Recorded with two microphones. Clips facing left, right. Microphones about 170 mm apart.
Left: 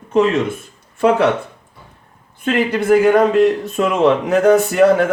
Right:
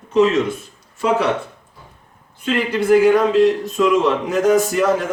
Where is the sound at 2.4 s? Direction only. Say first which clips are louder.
Left 2 dB; 55° left (ahead or behind).